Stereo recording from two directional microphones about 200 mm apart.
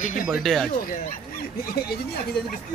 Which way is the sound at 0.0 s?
40° left (ahead or behind).